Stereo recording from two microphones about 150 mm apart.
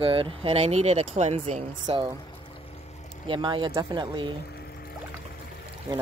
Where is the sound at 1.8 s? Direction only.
25° right (ahead or behind).